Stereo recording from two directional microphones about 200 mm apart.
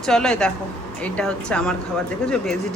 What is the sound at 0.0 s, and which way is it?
Speech, 5° left (ahead or behind).